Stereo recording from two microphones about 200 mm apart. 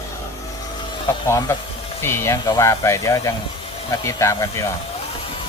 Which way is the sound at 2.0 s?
15° left (ahead or behind).